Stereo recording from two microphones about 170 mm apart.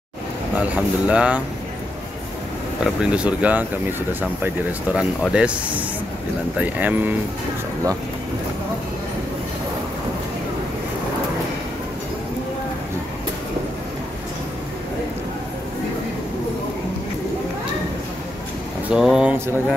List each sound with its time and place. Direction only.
0.6 s speech: 5° right (ahead or behind)
2.8 s speech: 5° right (ahead or behind)
4.9 s speech: 5° right (ahead or behind)
18.9 s a sound: 5° right (ahead or behind)